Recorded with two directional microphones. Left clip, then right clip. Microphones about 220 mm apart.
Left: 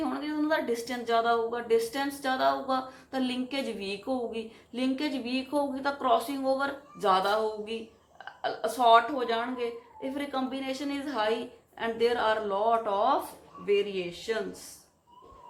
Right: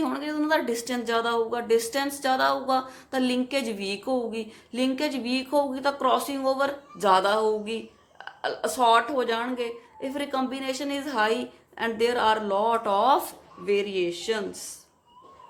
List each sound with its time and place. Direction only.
0.0 s speech: 45° right (ahead or behind)